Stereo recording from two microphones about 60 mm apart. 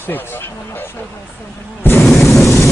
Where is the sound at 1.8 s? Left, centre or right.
Left.